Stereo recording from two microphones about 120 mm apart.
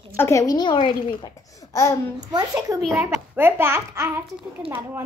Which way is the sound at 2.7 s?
30° right (ahead or behind).